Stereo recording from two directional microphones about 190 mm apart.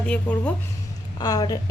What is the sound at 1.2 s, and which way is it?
Speech, 20° left (ahead or behind).